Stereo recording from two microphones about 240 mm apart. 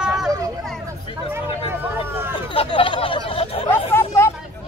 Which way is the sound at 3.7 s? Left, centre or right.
Centre.